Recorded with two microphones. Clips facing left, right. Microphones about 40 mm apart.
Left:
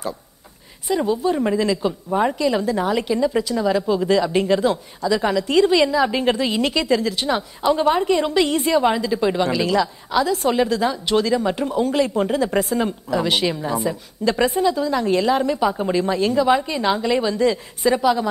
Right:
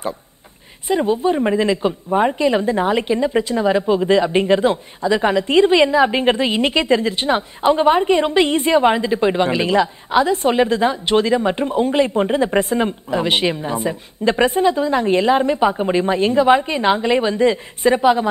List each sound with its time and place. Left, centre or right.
0.8 s a woman's voice: right